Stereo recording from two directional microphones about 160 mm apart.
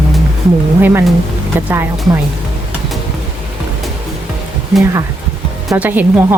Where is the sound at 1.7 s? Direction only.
15° right (ahead or behind).